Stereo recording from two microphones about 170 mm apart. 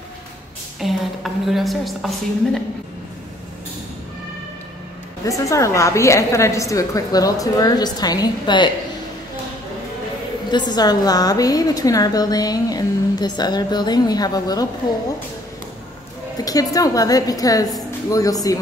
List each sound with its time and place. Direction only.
0.7 s a woman's voice: centre (ahead or behind)
5.2 s a woman's voice: 20° left (ahead or behind)
10.5 s a woman's voice: 25° left (ahead or behind)
16.4 s a woman's voice: 20° left (ahead or behind)